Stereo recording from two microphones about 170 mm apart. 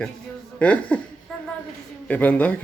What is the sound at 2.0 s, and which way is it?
Speech, 10° left (ahead or behind).